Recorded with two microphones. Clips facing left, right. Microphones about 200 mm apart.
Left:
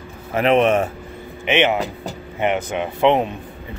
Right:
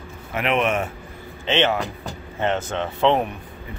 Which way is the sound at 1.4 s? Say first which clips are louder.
Left 3 dB; 15° left (ahead or behind).